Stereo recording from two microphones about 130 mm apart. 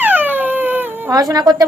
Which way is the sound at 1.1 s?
30° right (ahead or behind).